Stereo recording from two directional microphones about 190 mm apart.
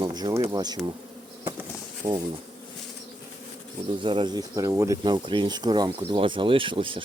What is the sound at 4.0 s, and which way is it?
Speech, 25° right (ahead or behind).